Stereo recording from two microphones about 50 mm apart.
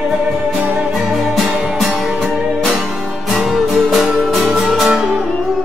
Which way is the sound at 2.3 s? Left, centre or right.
Centre.